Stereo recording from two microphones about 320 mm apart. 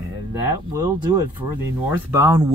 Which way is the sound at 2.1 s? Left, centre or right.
Centre.